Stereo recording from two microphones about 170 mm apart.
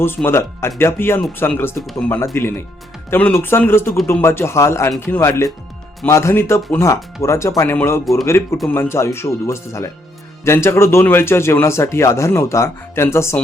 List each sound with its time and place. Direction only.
0.0 s speech: 15° left (ahead or behind)